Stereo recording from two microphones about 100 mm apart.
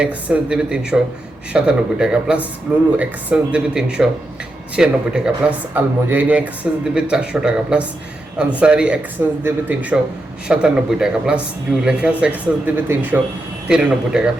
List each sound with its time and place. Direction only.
0.0 s speech: 10° right (ahead or behind)
13.7 s speech: 5° right (ahead or behind)